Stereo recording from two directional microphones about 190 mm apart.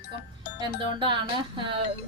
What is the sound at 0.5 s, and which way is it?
A woman's voice, 25° right (ahead or behind).